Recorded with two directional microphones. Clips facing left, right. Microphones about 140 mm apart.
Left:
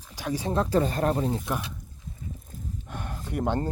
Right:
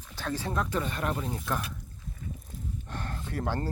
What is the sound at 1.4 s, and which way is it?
Speech, 10° left (ahead or behind).